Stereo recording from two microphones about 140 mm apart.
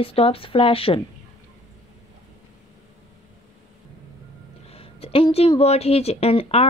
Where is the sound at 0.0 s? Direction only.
45° left (ahead or behind).